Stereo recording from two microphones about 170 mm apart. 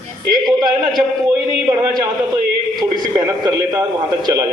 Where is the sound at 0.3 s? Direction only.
25° right (ahead or behind).